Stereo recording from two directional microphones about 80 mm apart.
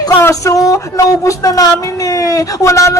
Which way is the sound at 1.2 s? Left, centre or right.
Left.